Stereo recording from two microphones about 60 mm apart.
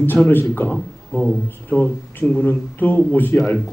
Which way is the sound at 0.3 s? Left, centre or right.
Left.